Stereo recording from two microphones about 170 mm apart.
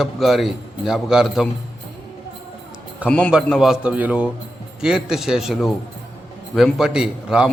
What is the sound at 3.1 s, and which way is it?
A man's voice, 5° left (ahead or behind).